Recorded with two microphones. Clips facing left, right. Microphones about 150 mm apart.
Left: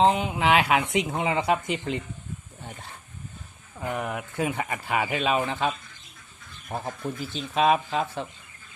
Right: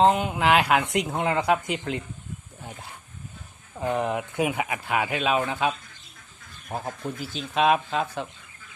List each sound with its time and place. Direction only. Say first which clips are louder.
0.0 s speech: right 1 dB; centre (ahead or behind)
3.8 s speech: right 5 dB; 20° right (ahead or behind)
4.6 s speech: right 1 dB; centre (ahead or behind)